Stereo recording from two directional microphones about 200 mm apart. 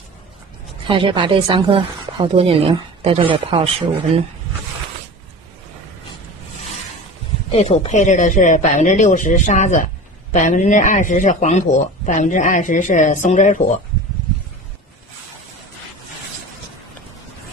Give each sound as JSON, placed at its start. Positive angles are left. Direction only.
{"t": 0.8, "sound": "a woman's voice", "side_deg": -25}
{"t": 7.5, "sound": "speech", "side_deg": 30}